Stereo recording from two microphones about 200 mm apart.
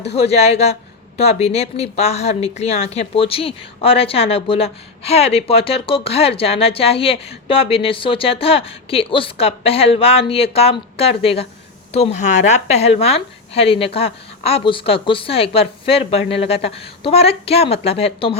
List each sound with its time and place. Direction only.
0.1 s a woman's voice: 30° left (ahead or behind)